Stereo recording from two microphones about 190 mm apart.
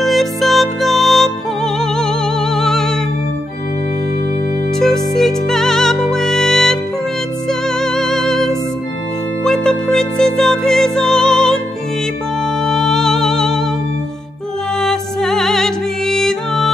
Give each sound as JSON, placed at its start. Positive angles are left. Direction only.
{"t": 0.0, "sound": "music", "side_deg": 0}
{"t": 4.7, "sound": "music", "side_deg": 0}
{"t": 12.6, "sound": "music", "side_deg": 0}
{"t": 14.8, "sound": "music", "side_deg": 0}